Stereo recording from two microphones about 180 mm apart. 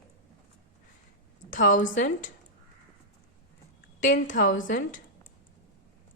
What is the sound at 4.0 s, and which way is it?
Speech, 45° left (ahead or behind).